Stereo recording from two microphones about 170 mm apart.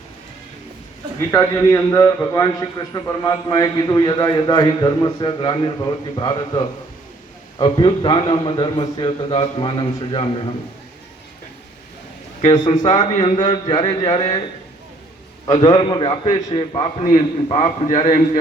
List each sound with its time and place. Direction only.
1.3 s a man's voice: 15° left (ahead or behind); by 10.5 s 30° left (ahead or behind)
12.5 s a man's voice: 25° left (ahead or behind)
15.4 s a man's voice: 25° left (ahead or behind)
17.8 s a man's voice: 50° left (ahead or behind)